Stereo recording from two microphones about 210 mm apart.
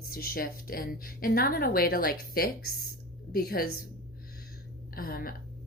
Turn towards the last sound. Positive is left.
turn(degrees=45)  # may be behind; listen again after turning